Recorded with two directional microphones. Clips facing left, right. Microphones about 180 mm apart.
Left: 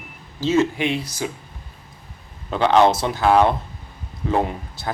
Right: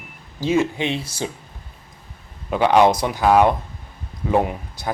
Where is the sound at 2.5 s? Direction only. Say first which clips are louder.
Right 1 dB; 10° right (ahead or behind).